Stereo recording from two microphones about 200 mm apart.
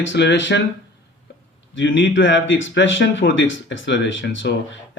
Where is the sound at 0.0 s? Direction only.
60° left (ahead or behind).